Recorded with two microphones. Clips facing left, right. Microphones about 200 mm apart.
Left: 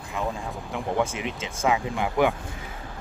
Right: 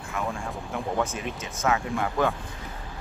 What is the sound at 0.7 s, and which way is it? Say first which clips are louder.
Speech: left 2 dB; 10° left (ahead or behind).